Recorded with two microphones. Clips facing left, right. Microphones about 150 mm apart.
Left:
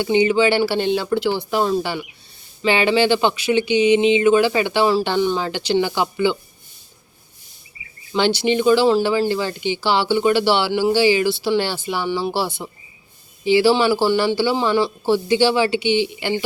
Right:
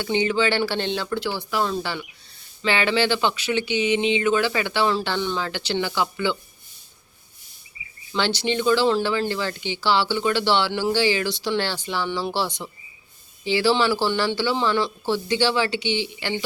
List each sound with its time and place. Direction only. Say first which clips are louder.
0.0 s speech: left 6 dB; 15° left (ahead or behind)
8.1 s speech: left 6 dB; 15° left (ahead or behind)